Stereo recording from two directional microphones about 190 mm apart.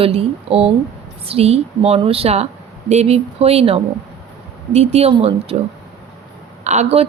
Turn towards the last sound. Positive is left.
turn(degrees=-35)  # may be behind; listen again after turning